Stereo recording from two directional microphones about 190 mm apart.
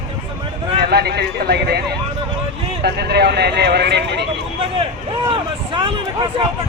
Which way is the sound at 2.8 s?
60° right (ahead or behind).